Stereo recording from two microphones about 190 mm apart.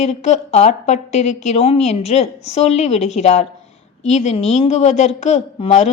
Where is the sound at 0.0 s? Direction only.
35° left (ahead or behind).